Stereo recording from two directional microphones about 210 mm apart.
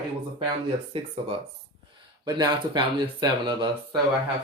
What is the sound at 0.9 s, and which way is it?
Speech, 25° right (ahead or behind).